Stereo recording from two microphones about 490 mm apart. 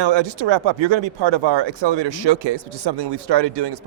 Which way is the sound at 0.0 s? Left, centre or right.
Right.